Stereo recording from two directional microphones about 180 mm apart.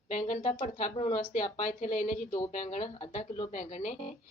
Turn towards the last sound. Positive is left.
turn(degrees=40)  # may be behind; listen again after turning